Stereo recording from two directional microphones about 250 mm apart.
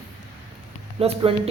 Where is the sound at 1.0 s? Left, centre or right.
Right.